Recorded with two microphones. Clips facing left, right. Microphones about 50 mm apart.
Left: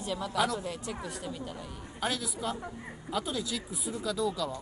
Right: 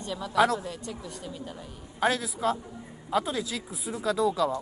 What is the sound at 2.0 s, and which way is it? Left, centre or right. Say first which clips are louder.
Speech: right 7 dB; right.